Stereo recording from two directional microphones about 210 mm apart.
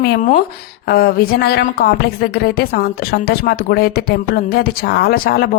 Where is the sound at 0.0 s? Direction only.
45° left (ahead or behind).